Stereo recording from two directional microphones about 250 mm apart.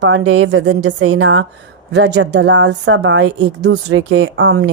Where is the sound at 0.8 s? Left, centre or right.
Right.